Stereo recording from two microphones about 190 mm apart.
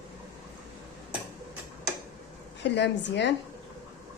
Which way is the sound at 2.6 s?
65° left (ahead or behind).